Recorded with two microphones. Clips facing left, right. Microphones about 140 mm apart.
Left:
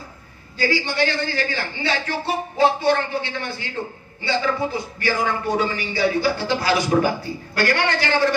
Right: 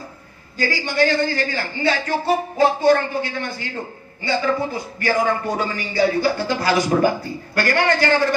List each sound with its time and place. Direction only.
0.6 s speech: 45° right (ahead or behind)
5.0 s speech: 45° right (ahead or behind)